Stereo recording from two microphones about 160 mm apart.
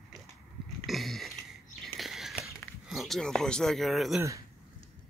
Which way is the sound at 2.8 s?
Centre (ahead or behind).